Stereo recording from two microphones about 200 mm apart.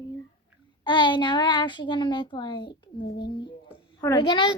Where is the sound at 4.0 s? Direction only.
20° left (ahead or behind).